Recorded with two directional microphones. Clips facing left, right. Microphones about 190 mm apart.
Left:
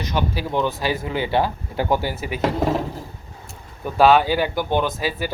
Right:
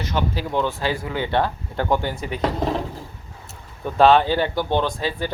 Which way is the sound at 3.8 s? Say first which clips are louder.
Even; 5° left (ahead or behind).